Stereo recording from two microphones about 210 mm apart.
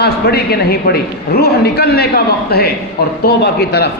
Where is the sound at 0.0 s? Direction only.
50° left (ahead or behind).